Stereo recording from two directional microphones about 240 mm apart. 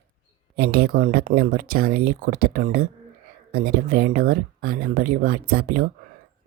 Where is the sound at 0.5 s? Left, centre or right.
Right.